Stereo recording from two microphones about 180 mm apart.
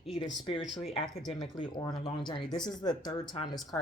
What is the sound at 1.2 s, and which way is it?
Speech, 25° left (ahead or behind).